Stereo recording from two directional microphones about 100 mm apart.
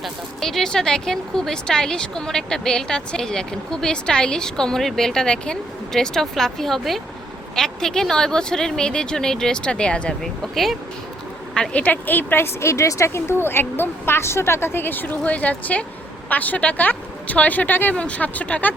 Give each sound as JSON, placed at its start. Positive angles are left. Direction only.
{"t": 0.0, "sound": "a woman's voice", "side_deg": 5}